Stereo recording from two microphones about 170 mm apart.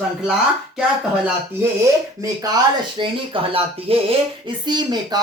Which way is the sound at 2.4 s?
25° right (ahead or behind).